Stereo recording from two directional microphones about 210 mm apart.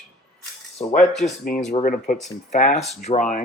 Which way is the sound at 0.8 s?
30° left (ahead or behind).